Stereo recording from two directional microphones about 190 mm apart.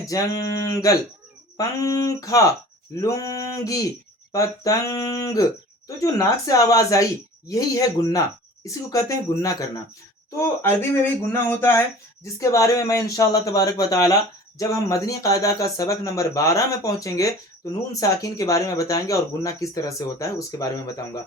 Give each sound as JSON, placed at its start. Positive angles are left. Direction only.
{"t": 0.1, "sound": "speech", "side_deg": 20}